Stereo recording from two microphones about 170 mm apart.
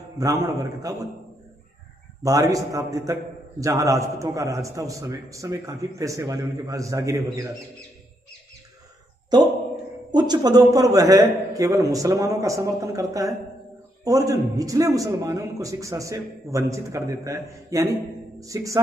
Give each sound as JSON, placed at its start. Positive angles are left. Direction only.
{"t": 0.2, "sound": "a man's voice", "side_deg": -20}
{"t": 2.2, "sound": "a man's voice", "side_deg": -20}
{"t": 10.1, "sound": "a man's voice", "side_deg": -25}